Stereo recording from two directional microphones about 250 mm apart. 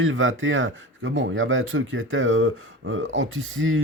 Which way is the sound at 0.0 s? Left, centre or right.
Right.